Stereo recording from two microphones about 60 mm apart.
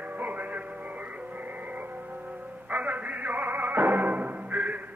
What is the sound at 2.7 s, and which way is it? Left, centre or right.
Music, right.